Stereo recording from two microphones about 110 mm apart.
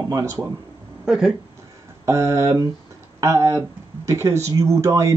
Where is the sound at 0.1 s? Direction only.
25° right (ahead or behind).